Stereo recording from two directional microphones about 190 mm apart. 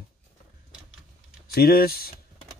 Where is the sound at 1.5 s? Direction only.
50° left (ahead or behind).